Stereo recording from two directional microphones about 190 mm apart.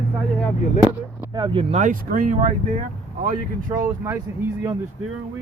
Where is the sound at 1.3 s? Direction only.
20° right (ahead or behind).